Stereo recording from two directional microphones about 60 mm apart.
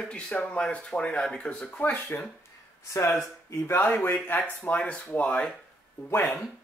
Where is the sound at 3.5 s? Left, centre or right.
Left.